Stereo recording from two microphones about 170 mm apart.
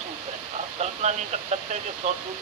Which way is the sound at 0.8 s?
40° right (ahead or behind).